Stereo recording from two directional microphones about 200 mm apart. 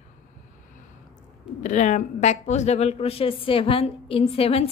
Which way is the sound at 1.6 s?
35° left (ahead or behind).